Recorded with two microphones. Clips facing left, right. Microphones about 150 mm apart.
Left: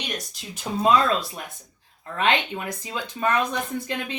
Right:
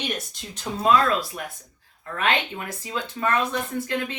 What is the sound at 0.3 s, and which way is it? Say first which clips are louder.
Speech: even; 10° left (ahead or behind).